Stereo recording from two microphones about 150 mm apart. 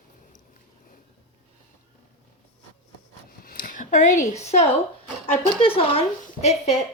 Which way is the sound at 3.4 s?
70° left (ahead or behind).